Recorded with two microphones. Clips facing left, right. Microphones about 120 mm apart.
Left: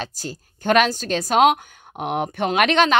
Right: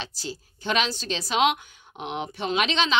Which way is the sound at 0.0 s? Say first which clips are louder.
Left 4 dB; 45° left (ahead or behind).